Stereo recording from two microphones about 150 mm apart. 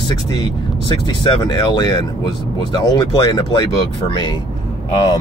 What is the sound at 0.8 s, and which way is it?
Speech, 30° left (ahead or behind).